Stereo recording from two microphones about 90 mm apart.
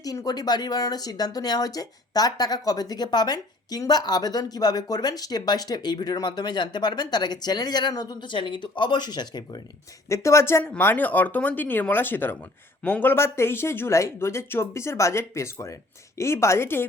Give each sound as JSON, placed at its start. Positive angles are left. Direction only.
{"t": 0.0, "sound": "speech", "side_deg": 45}
{"t": 10.1, "sound": "a woman's voice", "side_deg": 30}